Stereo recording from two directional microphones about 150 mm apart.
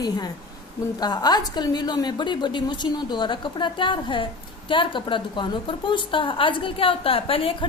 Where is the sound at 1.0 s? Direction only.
30° left (ahead or behind).